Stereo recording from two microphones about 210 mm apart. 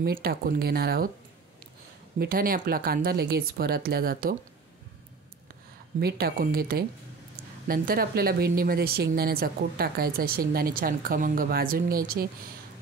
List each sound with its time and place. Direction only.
0.1 s speech: 50° right (ahead or behind)
2.1 s speech: 45° right (ahead or behind)
5.9 s speech: 50° right (ahead or behind)